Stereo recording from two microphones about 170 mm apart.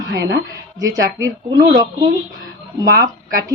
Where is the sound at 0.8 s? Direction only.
20° right (ahead or behind).